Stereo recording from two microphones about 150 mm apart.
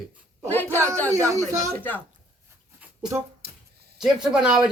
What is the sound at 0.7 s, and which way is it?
A child's voice, 15° right (ahead or behind).